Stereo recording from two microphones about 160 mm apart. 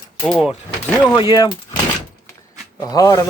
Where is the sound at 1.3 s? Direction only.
25° left (ahead or behind).